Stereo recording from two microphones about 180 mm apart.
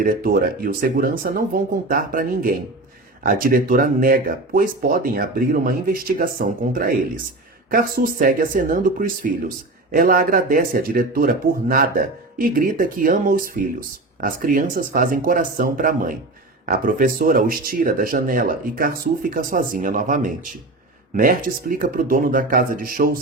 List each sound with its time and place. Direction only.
0.0 s speech: 55° right (ahead or behind)